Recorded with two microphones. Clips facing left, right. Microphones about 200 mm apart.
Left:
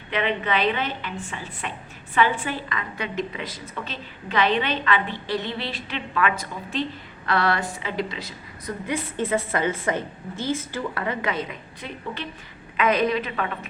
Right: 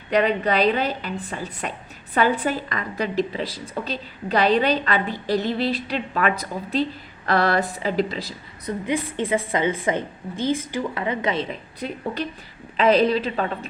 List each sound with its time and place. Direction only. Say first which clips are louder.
0.1 s a woman's voice: right 5 dB; 40° right (ahead or behind)
8.6 s a woman's voice: right 4 dB; 15° right (ahead or behind)